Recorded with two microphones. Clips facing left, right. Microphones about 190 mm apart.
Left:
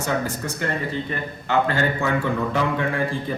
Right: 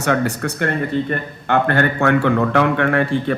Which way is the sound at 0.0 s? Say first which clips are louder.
Right 6 dB; 70° right (ahead or behind).